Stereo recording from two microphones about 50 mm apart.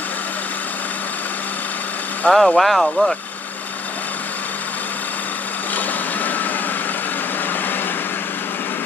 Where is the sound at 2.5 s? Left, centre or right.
Centre.